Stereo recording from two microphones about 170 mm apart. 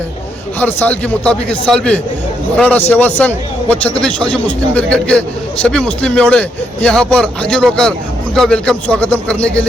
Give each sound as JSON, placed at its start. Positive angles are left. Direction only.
{"t": 0.6, "sound": "a man's voice", "side_deg": 10}